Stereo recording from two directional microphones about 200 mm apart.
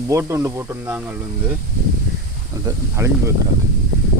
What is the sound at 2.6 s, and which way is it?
Speech, 15° right (ahead or behind).